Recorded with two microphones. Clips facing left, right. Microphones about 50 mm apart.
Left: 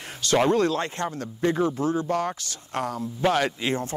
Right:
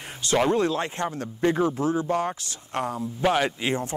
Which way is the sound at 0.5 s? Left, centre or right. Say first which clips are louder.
Left 1 dB; centre.